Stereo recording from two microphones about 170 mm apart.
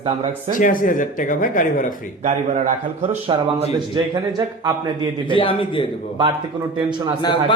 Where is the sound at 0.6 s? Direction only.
50° left (ahead or behind).